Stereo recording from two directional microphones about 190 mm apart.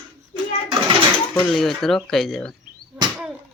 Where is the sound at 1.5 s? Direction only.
Centre (ahead or behind).